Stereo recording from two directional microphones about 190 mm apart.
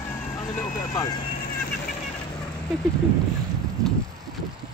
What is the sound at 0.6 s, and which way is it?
Speech, 15° left (ahead or behind).